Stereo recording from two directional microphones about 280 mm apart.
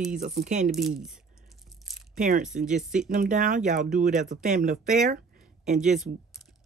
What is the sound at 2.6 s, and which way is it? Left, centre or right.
A woman's voice, right.